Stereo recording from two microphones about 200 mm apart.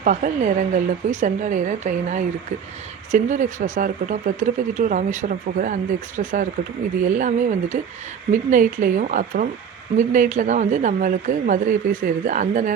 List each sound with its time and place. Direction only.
0.0 s speech: 40° right (ahead or behind)